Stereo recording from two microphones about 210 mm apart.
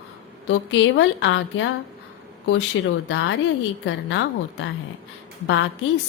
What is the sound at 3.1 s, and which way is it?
A woman's voice, 65° left (ahead or behind).